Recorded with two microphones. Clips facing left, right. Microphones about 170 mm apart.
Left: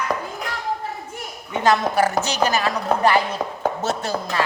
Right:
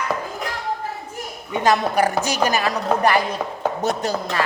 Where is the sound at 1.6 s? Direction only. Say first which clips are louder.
Even; 15° right (ahead or behind).